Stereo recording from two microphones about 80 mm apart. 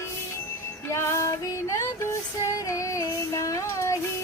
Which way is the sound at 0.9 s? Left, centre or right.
Left.